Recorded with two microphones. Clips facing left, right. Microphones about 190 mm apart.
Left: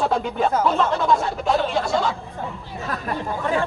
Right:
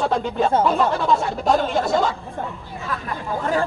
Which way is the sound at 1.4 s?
45° right (ahead or behind).